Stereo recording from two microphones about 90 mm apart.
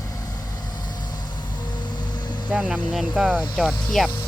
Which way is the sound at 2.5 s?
10° right (ahead or behind).